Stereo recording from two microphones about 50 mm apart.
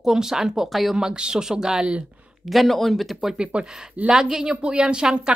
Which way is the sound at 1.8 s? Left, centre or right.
Right.